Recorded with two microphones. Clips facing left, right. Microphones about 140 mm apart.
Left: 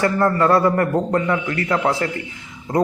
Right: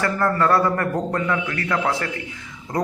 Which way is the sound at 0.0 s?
25° left (ahead or behind).